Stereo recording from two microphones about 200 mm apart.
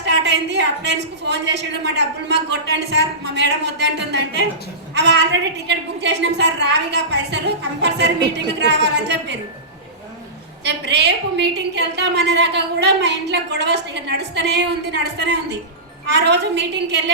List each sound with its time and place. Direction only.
0.0 s a woman's voice: 60° right (ahead or behind)
10.6 s a woman's voice: 60° right (ahead or behind)